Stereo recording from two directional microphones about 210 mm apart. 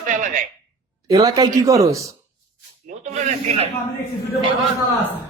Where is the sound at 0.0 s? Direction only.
40° right (ahead or behind).